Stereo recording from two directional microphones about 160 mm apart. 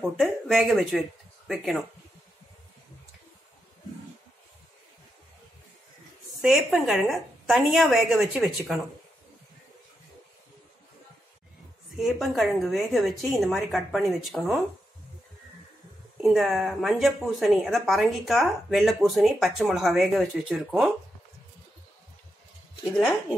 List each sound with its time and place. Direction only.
0.0 s speech: centre (ahead or behind)
6.4 s speech: centre (ahead or behind)
12.0 s speech: centre (ahead or behind)
16.2 s speech: centre (ahead or behind)